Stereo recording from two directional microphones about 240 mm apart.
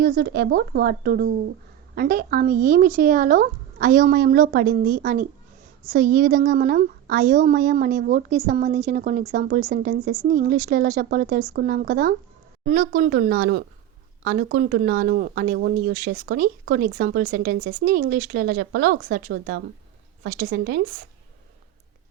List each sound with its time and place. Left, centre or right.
0.0 s a woman's voice: right